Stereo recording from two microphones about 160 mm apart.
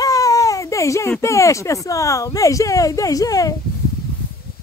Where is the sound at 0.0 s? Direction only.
20° left (ahead or behind).